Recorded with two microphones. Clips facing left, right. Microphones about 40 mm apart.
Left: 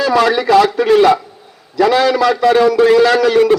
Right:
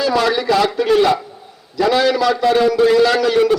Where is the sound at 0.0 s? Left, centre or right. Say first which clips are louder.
Left 4 dB; left.